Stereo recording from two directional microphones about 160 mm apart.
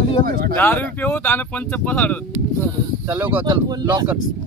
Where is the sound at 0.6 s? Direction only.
10° left (ahead or behind).